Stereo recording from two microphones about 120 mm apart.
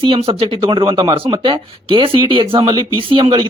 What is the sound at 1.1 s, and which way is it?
Speech, 45° right (ahead or behind).